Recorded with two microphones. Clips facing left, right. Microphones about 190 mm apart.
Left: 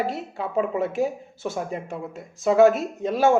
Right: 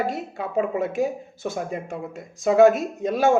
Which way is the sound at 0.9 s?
15° right (ahead or behind).